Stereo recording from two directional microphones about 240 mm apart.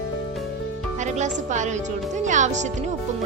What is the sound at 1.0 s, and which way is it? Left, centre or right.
A woman's voice, right.